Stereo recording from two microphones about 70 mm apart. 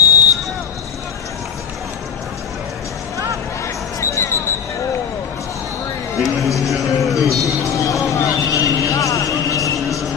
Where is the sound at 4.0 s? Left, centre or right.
Left.